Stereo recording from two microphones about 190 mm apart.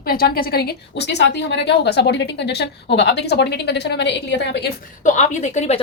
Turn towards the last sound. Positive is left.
turn(degrees=35)  # may be behind; listen again after turning